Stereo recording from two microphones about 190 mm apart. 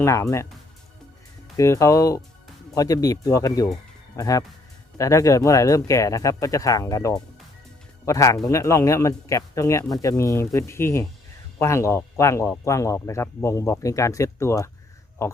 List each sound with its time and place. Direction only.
0.0 s speech: 15° left (ahead or behind)
1.5 s speech: 15° left (ahead or behind)